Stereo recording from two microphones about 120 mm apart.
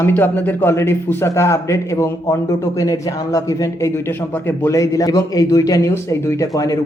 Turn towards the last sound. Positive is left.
turn(degrees=30)  # may be behind; listen again after turning